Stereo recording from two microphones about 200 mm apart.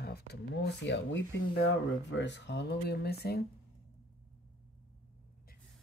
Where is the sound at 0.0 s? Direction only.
55° left (ahead or behind).